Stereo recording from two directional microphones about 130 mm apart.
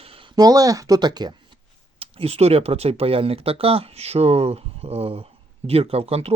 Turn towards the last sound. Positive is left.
turn(degrees=-50)  # may be behind; listen again after turning